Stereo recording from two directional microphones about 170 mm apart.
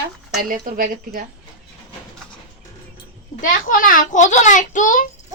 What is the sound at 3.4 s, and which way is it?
A child's voice, 55° left (ahead or behind).